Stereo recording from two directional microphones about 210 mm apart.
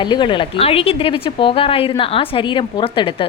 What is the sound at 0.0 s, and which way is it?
A woman's voice, 20° left (ahead or behind).